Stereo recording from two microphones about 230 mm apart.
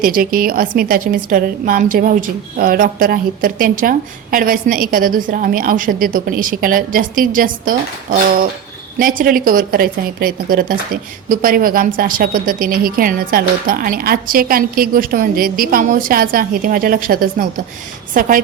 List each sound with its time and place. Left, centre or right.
0.0 s a woman's voice: right
9.0 s a woman's voice: right